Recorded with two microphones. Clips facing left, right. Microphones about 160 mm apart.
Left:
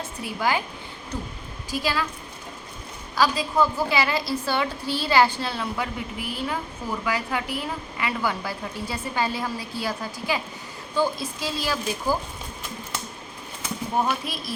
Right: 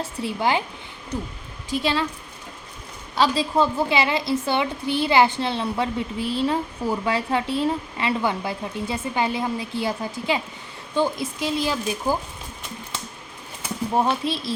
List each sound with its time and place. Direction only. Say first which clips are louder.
0.0 s a woman's voice: right 3 dB; 25° right (ahead or behind)
1.7 s a woman's voice: right 3 dB; 25° right (ahead or behind)
3.2 s a woman's voice: right 2 dB; 25° right (ahead or behind)
13.9 s a woman's voice: right 4 dB; 25° right (ahead or behind)